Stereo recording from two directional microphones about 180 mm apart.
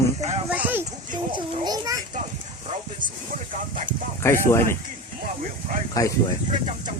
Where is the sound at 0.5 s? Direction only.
10° right (ahead or behind).